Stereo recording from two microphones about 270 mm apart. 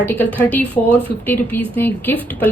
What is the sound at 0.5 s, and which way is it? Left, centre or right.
Speech, centre.